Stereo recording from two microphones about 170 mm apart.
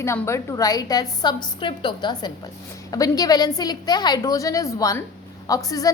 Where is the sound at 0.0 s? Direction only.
15° left (ahead or behind).